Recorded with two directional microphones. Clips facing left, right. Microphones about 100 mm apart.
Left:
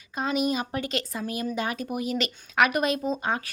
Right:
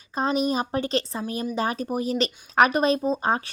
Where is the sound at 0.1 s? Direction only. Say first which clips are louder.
Right 3 dB; 35° right (ahead or behind).